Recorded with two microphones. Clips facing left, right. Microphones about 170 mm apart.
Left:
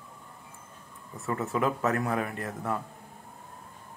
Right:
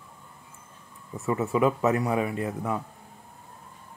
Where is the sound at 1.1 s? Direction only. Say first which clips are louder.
Right 5 dB; 15° right (ahead or behind).